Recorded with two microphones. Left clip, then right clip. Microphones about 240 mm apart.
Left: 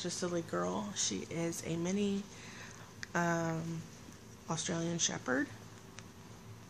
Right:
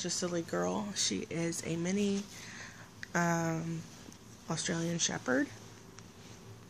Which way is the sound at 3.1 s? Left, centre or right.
Centre.